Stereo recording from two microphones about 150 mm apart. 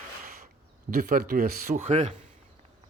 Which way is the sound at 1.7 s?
40° right (ahead or behind).